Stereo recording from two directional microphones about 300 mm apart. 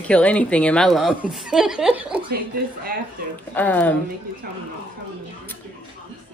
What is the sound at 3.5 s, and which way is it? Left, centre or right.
Speech, centre.